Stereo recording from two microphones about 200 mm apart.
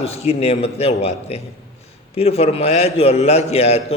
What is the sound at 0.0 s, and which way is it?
A man's voice, 30° left (ahead or behind).